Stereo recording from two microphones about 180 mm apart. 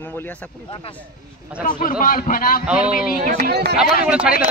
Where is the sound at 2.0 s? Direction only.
50° left (ahead or behind).